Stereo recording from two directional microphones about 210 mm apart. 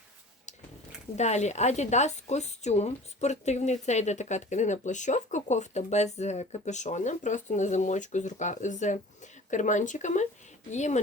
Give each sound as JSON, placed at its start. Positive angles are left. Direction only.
{"t": 1.1, "sound": "a woman's voice", "side_deg": 30}